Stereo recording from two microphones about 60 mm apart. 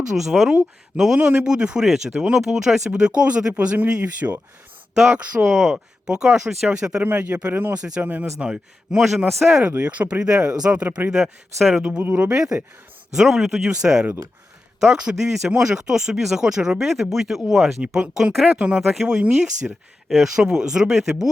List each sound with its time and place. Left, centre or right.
0.1 s speech: centre
2.9 s speech: centre
5.5 s speech: centre
6.1 s speech: centre
7.0 s speech: right
7.8 s speech: centre
8.0 s speech: right
8.4 s speech: centre
9.6 s speech: right
12.3 s speech: centre
18.5 s speech: centre
18.8 s speech: centre